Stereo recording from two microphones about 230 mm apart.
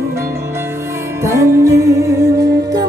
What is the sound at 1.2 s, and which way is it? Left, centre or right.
Music, centre.